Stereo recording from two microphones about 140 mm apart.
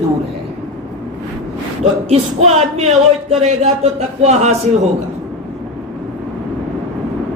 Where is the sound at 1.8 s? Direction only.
50° right (ahead or behind).